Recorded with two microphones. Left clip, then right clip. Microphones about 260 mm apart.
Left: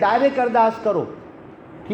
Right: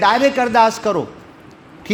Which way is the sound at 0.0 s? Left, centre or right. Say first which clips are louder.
Right 3 dB; right.